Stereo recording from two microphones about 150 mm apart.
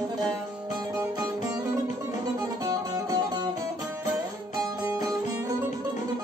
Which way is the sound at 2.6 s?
25° right (ahead or behind).